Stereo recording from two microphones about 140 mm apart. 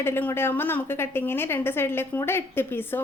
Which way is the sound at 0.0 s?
15° left (ahead or behind).